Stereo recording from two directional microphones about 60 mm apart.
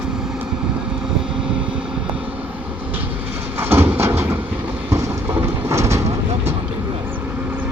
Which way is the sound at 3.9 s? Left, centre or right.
Right.